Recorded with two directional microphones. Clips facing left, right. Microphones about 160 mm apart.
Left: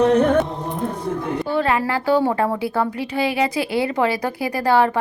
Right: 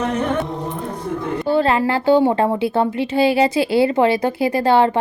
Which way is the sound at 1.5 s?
30° right (ahead or behind).